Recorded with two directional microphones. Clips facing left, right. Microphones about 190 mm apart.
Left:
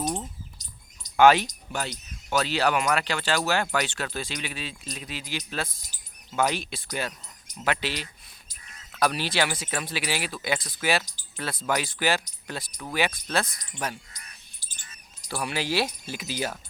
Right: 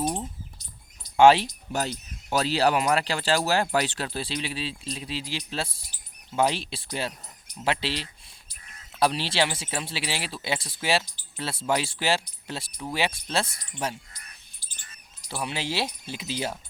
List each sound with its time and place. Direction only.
1.1 s speech: 30° right (ahead or behind)
15.3 s speech: 20° right (ahead or behind)